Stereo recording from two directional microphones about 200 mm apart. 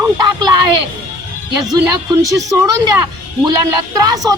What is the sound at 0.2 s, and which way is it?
Music, 20° right (ahead or behind).